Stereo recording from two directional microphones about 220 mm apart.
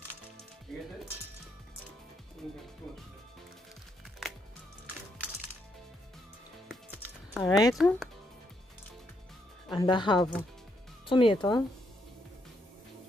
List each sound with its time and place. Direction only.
0.7 s speech: centre (ahead or behind)
4.2 s music: centre (ahead or behind)
7.3 s speech: 5° left (ahead or behind)
9.8 s speech: 20° left (ahead or behind)